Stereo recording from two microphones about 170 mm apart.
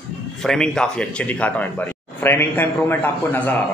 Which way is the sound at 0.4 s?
5° left (ahead or behind).